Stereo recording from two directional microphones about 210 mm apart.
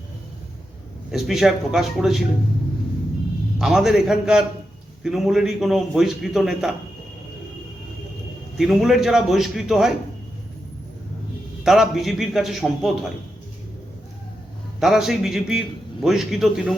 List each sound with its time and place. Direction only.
1.1 s a man's voice: centre (ahead or behind)
3.6 s a man's voice: centre (ahead or behind)
8.5 s a man's voice: centre (ahead or behind)
11.6 s a man's voice: centre (ahead or behind)
14.8 s a man's voice: centre (ahead or behind)